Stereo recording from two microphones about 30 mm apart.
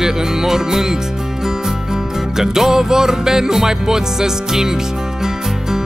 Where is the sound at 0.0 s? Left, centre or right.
Centre.